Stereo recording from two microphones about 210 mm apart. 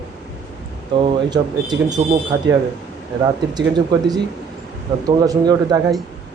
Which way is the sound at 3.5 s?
20° right (ahead or behind).